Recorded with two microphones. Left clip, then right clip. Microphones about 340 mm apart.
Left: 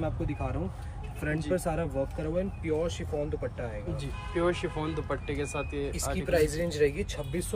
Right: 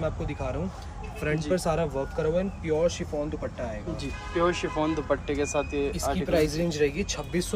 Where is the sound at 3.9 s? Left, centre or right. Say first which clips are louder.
Right 3 dB; centre.